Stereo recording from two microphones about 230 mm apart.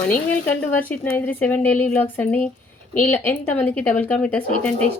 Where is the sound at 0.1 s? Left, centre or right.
Centre.